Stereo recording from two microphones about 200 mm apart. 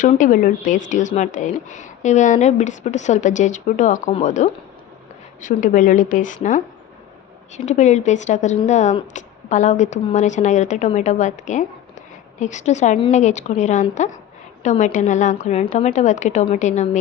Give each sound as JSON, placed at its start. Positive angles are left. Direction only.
{"t": 0.0, "sound": "a woman's voice", "side_deg": 40}